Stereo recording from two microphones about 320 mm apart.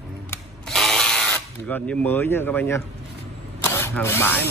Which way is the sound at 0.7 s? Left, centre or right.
Centre.